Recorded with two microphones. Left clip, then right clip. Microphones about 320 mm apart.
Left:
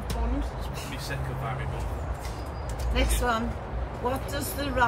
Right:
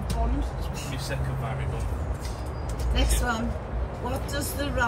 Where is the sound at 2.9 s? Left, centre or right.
Left.